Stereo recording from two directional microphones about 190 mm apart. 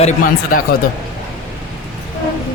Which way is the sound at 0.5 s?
45° left (ahead or behind).